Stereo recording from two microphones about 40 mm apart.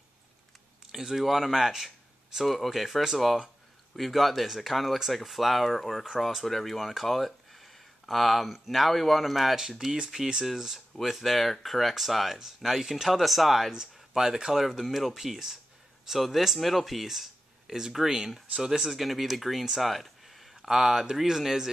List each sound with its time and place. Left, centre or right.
0.9 s speech: centre
9.9 s speech: centre
13.7 s speech: centre